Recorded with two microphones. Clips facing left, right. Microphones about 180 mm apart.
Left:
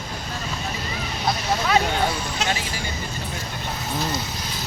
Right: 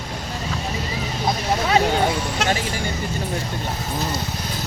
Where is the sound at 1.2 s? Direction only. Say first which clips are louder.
Right 1 dB; 25° right (ahead or behind).